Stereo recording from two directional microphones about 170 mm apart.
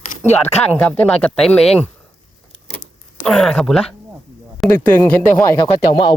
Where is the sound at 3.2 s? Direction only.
Centre (ahead or behind).